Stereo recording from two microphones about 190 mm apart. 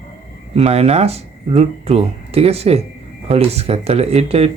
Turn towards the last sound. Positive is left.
turn(degrees=-30)  # may be behind; listen again after turning